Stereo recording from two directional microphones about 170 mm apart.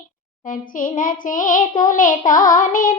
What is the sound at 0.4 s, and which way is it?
Child singing, 50° left (ahead or behind).